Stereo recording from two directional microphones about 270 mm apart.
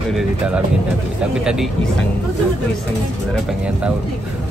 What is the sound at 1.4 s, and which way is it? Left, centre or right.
Speech, centre.